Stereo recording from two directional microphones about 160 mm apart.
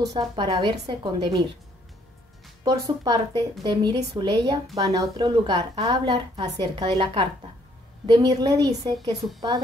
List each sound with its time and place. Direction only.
0.0 s a woman's voice: 20° right (ahead or behind)
2.6 s a woman's voice: 20° right (ahead or behind)